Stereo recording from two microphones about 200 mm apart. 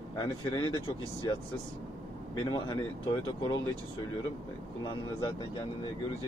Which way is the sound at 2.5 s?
20° left (ahead or behind).